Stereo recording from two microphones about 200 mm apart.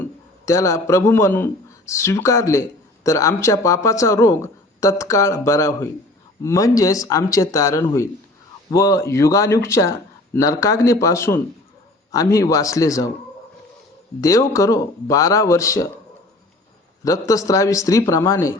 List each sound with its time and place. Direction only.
0.0 s a man's voice: 15° left (ahead or behind)
14.2 s speech: 15° left (ahead or behind)
17.0 s speech: 15° left (ahead or behind)